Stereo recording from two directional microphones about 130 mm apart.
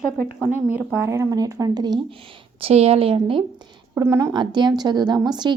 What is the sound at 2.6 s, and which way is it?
Speech, 55° right (ahead or behind).